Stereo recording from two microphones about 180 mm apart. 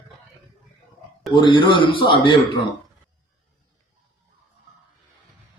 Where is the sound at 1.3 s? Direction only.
25° left (ahead or behind).